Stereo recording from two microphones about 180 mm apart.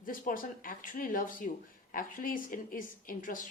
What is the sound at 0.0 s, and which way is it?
Speech, 50° left (ahead or behind).